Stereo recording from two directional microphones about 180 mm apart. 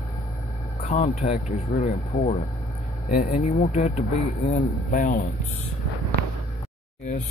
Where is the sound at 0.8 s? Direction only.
40° left (ahead or behind).